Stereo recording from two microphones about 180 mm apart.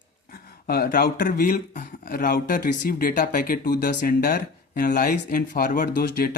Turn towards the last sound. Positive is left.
turn(degrees=60)  # may be behind; listen again after turning